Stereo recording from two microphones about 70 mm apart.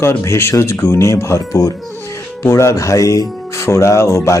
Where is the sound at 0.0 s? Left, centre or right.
Left.